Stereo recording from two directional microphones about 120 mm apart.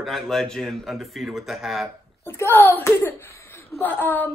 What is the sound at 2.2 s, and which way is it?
A child's voice, 20° left (ahead or behind).